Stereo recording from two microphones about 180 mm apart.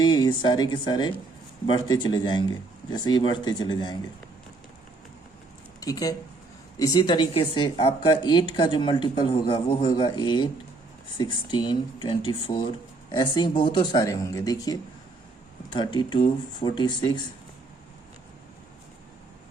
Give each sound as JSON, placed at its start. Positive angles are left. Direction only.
{"t": 0.0, "sound": "speech", "side_deg": 25}
{"t": 5.8, "sound": "speech", "side_deg": 20}